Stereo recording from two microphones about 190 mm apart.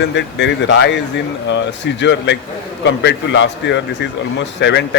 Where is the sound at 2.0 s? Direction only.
70° left (ahead or behind).